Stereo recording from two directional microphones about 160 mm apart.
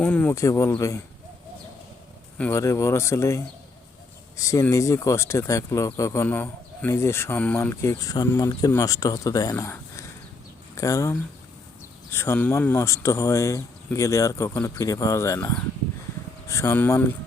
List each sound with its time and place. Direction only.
0.0 s speech: 10° left (ahead or behind)
2.4 s speech: 15° left (ahead or behind)